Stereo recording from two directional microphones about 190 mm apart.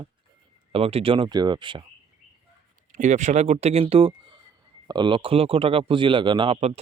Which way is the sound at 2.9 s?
40° right (ahead or behind).